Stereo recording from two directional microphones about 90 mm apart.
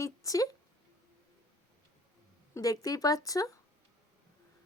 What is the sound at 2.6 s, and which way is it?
A woman's voice, 45° left (ahead or behind).